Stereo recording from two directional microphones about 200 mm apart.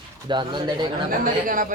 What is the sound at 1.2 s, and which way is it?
Speech, 45° right (ahead or behind).